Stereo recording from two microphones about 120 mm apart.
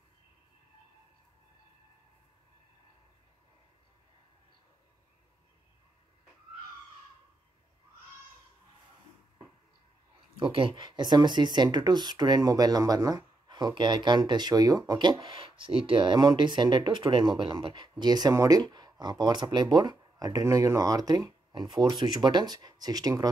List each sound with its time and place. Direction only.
10.4 s speech: 45° right (ahead or behind)